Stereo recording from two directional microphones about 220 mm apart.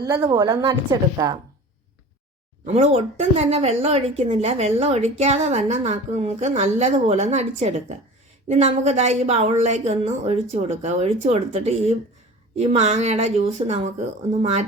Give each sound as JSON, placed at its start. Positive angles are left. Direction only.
{"t": 0.0, "sound": "a woman's voice", "side_deg": -15}
{"t": 2.6, "sound": "a woman's voice", "side_deg": -30}